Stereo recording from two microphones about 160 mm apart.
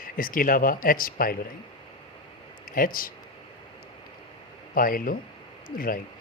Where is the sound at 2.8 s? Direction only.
60° left (ahead or behind).